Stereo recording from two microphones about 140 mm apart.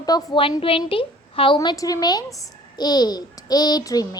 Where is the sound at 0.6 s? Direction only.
40° left (ahead or behind).